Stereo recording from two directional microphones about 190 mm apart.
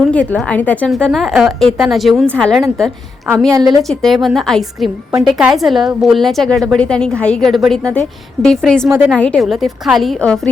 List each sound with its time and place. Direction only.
0.1 s a woman's voice: 5° left (ahead or behind)
3.5 s a woman's voice: 20° right (ahead or behind)
3.8 s a woman's voice: centre (ahead or behind)